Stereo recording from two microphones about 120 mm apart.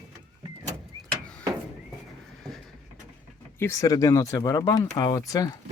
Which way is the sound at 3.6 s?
25° left (ahead or behind).